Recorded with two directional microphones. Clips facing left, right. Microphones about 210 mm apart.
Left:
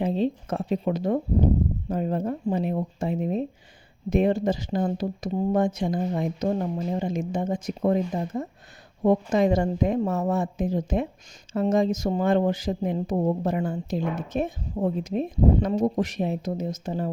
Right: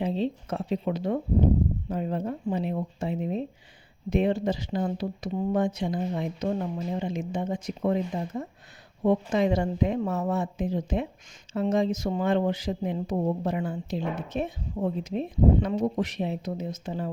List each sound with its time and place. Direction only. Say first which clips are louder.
0.0 s speech: left 3 dB; 50° left (ahead or behind)